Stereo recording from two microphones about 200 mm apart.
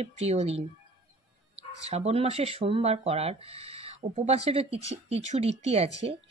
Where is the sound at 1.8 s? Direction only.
30° right (ahead or behind).